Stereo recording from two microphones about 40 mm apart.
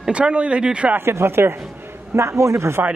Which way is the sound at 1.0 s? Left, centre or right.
Right.